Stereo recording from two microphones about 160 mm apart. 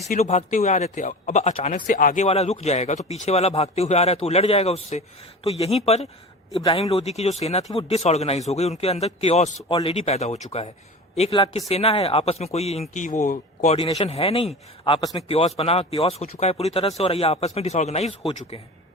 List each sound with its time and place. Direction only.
0.1 s speech: 45° left (ahead or behind)
2.2 s speech: 40° left (ahead or behind)
13.9 s speech: 40° left (ahead or behind)